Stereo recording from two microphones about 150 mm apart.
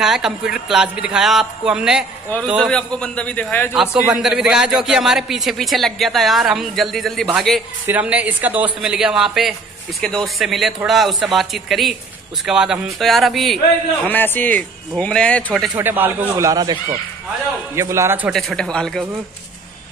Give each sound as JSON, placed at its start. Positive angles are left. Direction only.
{"t": 0.0, "sound": "a man's voice", "side_deg": -5}
{"t": 2.7, "sound": "speech", "side_deg": 5}
{"t": 3.7, "sound": "a man's voice", "side_deg": -5}
{"t": 7.8, "sound": "a man's voice", "side_deg": -10}
{"t": 14.0, "sound": "speech", "side_deg": 15}
{"t": 15.8, "sound": "speech", "side_deg": -15}
{"t": 17.7, "sound": "speech", "side_deg": -20}
{"t": 18.3, "sound": "a man's voice", "side_deg": 5}